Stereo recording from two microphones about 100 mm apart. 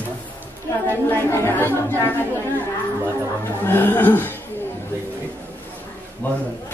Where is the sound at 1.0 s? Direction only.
25° left (ahead or behind).